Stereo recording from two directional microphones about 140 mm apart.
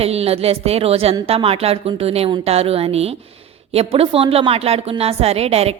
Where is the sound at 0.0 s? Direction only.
45° right (ahead or behind).